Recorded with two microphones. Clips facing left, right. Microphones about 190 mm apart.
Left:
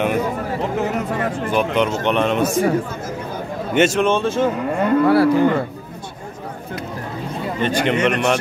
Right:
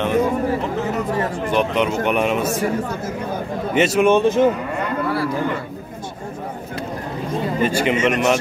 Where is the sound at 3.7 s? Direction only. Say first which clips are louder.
Left 1 dB; centre (ahead or behind).